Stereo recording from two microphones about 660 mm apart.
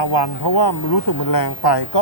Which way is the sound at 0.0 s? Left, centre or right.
Left.